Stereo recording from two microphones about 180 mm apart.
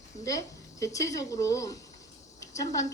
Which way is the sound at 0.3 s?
20° left (ahead or behind).